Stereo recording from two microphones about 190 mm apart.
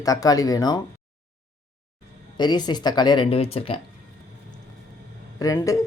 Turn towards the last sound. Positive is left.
turn(degrees=15)  # may be behind; listen again after turning